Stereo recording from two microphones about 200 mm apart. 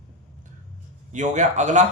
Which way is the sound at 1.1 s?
35° right (ahead or behind).